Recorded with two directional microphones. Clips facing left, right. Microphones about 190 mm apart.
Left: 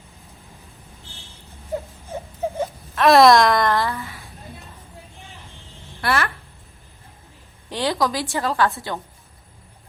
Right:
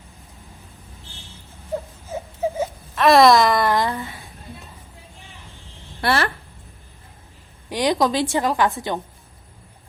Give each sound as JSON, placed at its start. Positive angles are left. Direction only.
{"t": 1.7, "sound": "wail", "side_deg": 0}
{"t": 4.0, "sound": "a sound", "side_deg": -15}
{"t": 6.0, "sound": "a woman's voice", "side_deg": -30}
{"t": 7.7, "sound": "a woman's voice", "side_deg": -15}